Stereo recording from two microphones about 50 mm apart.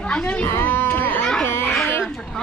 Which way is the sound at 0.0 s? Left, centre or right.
Left.